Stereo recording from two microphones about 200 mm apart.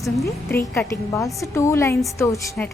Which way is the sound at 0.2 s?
10° left (ahead or behind).